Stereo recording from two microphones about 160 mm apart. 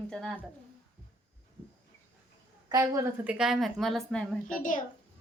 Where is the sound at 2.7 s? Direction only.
20° right (ahead or behind).